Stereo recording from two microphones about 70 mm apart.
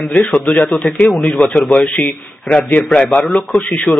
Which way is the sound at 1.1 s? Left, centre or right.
Centre.